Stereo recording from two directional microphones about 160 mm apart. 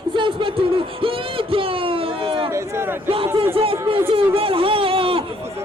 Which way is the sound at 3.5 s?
35° right (ahead or behind).